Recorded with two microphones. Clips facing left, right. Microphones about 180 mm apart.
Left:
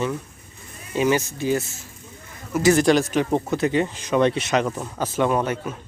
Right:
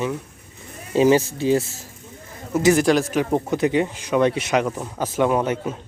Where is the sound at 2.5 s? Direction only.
20° right (ahead or behind).